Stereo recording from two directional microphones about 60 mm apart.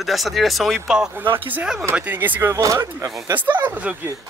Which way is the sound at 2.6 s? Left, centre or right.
Right.